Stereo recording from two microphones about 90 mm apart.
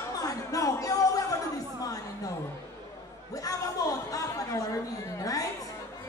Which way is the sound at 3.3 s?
40° left (ahead or behind).